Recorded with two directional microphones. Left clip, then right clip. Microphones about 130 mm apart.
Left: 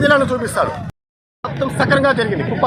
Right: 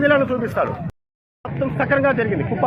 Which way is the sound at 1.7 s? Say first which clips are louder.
Left 3 dB; 35° left (ahead or behind).